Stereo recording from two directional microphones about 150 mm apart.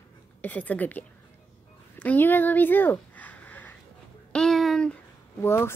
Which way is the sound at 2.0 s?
10° left (ahead or behind).